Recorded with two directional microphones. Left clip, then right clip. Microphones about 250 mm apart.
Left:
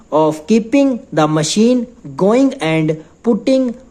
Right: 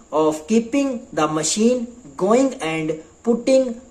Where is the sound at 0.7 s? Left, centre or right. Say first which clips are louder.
Left 8 dB; left.